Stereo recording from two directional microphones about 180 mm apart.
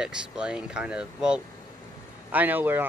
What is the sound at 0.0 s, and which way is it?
Speech, 5° right (ahead or behind).